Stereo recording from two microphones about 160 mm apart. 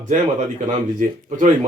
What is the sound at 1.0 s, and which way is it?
Speech, 55° right (ahead or behind).